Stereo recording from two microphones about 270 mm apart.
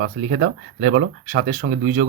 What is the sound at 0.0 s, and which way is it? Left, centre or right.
Speech, right.